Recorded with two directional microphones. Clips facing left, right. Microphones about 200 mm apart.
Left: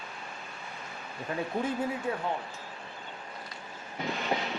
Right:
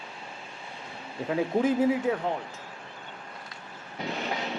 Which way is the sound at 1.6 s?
90° right.